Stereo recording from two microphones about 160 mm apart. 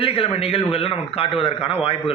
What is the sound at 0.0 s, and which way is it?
A man's voice, 35° left (ahead or behind).